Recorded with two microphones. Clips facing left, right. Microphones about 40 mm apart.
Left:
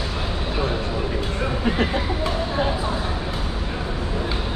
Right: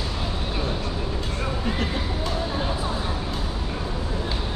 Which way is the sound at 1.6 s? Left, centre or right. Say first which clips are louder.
Left 7 dB; left.